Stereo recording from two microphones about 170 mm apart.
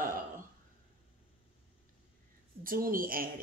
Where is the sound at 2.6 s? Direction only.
55° right (ahead or behind).